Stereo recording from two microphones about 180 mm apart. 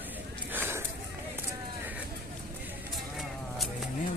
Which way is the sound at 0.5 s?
10° right (ahead or behind).